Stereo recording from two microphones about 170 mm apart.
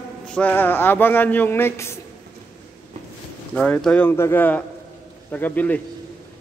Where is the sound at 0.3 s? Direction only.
10° left (ahead or behind).